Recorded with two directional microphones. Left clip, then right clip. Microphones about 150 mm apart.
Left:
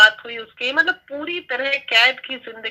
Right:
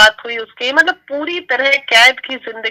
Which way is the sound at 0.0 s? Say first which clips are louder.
Right 3 dB; 35° right (ahead or behind).